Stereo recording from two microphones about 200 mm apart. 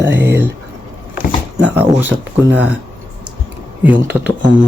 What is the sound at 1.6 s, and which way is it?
Speech, 10° right (ahead or behind).